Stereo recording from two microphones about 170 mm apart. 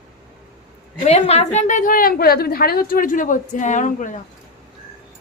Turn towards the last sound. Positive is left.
turn(degrees=50)  # may be behind; listen again after turning